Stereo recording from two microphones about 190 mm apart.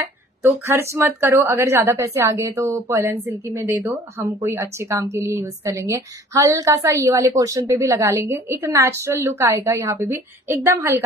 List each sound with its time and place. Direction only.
0.4 s a woman's voice: 15° right (ahead or behind)